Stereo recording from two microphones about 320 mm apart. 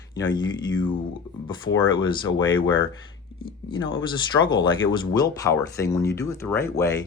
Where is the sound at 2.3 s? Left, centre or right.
Left.